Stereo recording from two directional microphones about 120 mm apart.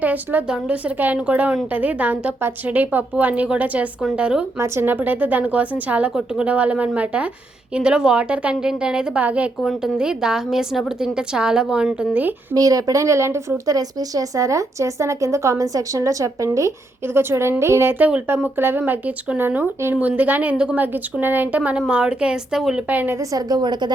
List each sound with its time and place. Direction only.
0.0 s speech: 15° right (ahead or behind)
4.5 s a woman's voice: 20° right (ahead or behind)
12.5 s speech: 30° right (ahead or behind); by 23.1 s 15° right (ahead or behind)
23.3 s a woman's voice: 35° right (ahead or behind)